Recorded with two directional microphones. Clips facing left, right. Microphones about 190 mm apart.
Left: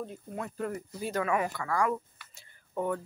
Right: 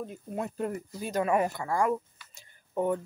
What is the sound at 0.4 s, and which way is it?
Speech, 20° right (ahead or behind).